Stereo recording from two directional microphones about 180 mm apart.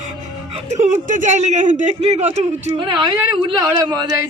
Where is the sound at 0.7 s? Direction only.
40° right (ahead or behind).